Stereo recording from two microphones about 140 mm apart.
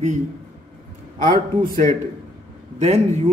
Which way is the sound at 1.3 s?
75° right (ahead or behind).